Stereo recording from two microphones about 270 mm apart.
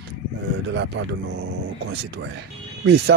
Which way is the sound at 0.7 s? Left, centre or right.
Right.